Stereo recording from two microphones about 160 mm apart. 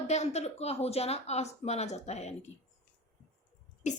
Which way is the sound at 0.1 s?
45° left (ahead or behind).